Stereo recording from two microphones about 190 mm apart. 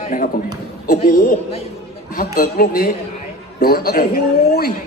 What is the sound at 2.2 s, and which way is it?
A man's voice, 50° left (ahead or behind).